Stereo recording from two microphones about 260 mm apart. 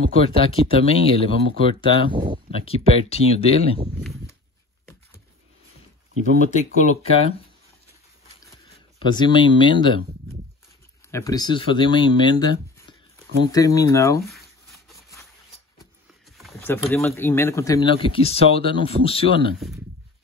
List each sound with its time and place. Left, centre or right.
0.2 s speech: left
2.1 s speech: centre
2.5 s speech: left
6.4 s speech: left
9.0 s speech: centre
11.1 s speech: centre
14.2 s a sound: centre
16.3 s speech: centre; by 19.5 s left